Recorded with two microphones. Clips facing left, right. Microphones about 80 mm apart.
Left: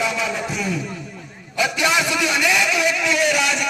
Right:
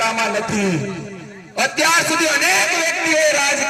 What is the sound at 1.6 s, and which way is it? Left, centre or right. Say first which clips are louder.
A man's voice: right 3 dB; right.